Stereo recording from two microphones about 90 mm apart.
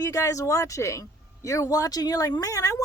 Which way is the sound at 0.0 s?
35° left (ahead or behind).